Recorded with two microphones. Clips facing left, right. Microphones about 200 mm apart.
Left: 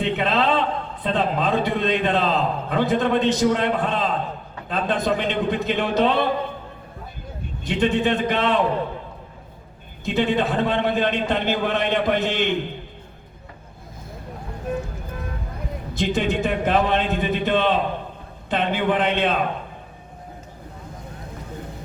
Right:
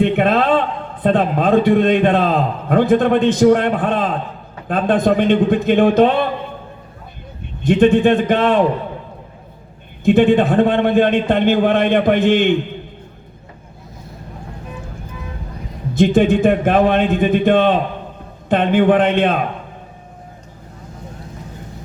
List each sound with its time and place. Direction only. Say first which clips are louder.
0.0 s a sound: right 7 dB; 50° right (ahead or behind)
1.0 s a man's voice: right 7 dB; 50° right (ahead or behind)
7.6 s a man's voice: right 9 dB; 50° right (ahead or behind)
10.0 s a man's voice: right 9 dB; 50° right (ahead or behind)
16.0 s a man's voice: right 10 dB; 50° right (ahead or behind)